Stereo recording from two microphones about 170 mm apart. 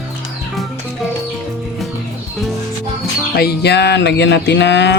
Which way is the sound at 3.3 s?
70° left (ahead or behind).